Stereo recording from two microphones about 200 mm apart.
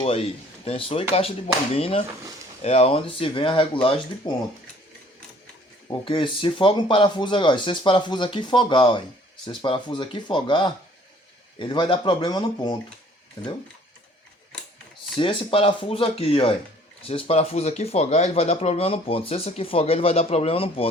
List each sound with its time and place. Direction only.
0.0 s speech: 30° left (ahead or behind)
5.9 s speech: 25° left (ahead or behind)
15.2 s speech: 25° left (ahead or behind)